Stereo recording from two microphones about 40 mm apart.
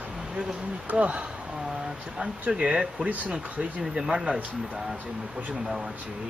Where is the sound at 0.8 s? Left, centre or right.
Right.